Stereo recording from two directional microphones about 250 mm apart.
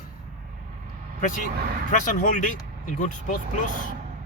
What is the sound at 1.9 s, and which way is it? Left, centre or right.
Speech, left.